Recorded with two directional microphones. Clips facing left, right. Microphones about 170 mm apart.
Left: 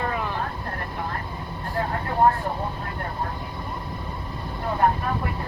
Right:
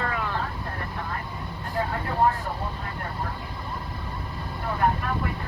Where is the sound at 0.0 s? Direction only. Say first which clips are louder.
Left 2 dB; 15° left (ahead or behind).